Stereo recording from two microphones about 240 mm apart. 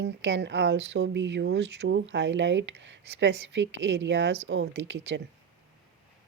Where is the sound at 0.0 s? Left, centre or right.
Right.